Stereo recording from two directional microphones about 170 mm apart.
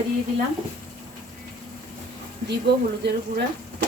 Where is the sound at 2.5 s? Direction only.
80° right.